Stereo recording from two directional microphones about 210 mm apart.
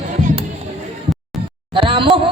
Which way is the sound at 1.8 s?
25° right (ahead or behind).